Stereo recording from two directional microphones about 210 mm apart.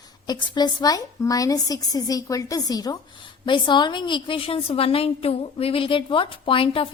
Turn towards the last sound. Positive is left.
turn(degrees=25)  # may be behind; listen again after turning